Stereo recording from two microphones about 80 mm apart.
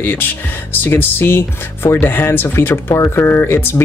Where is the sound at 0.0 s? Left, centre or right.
Left.